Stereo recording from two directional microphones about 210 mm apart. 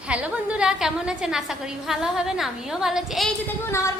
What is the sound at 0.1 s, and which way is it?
A woman's voice, 5° right (ahead or behind).